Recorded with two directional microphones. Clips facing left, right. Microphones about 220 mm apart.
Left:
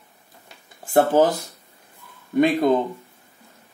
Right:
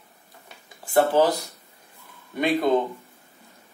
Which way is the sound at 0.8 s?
45° left (ahead or behind).